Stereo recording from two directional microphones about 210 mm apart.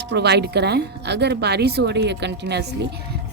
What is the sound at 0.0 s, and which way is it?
A woman's voice, 55° right (ahead or behind).